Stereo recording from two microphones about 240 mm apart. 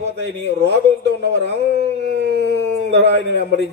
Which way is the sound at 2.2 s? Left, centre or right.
Right.